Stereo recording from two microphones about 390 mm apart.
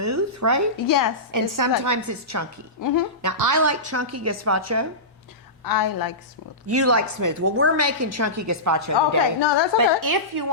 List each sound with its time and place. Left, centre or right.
0.0 s a woman's voice: right
0.8 s a woman's voice: left
1.3 s a woman's voice: right
2.8 s a woman's voice: left
3.2 s a woman's voice: right
5.6 s a woman's voice: left
6.7 s a woman's voice: right
7.5 s a woman's voice: right
9.0 s a woman's voice: left
9.7 s a woman's voice: right